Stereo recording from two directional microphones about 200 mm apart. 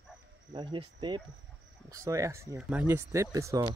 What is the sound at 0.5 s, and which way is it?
Speech, 25° right (ahead or behind).